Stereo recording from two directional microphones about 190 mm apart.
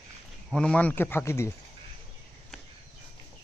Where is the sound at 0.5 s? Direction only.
5° left (ahead or behind).